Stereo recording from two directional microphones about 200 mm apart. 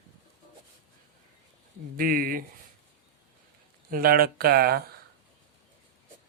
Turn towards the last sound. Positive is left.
turn(degrees=-50)  # may be behind; listen again after turning